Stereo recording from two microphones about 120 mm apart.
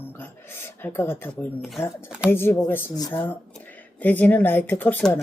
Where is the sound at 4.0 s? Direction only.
15° left (ahead or behind).